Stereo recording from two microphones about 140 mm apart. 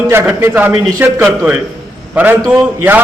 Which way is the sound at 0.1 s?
15° right (ahead or behind).